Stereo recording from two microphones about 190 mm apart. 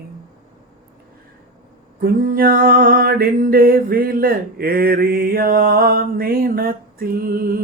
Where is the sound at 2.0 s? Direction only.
50° right (ahead or behind).